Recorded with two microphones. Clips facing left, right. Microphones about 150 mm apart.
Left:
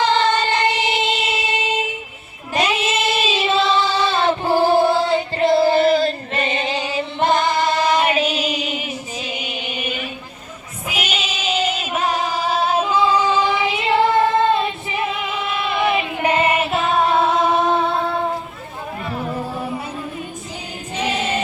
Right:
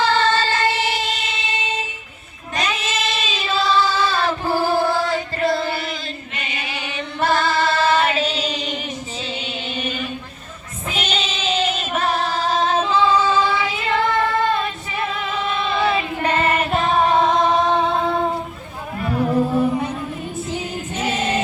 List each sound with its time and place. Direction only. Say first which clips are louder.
0.0 s music: left 1 dB; 20° left (ahead or behind)
2.6 s female singing: left 4 dB; 30° left (ahead or behind); by 8.8 s 10° left (ahead or behind)
9.3 s music: right 1 dB; 15° left (ahead or behind)
10.8 s female singing: right 1 dB; 10° left (ahead or behind)
19.0 s music: right 7 dB; centre (ahead or behind)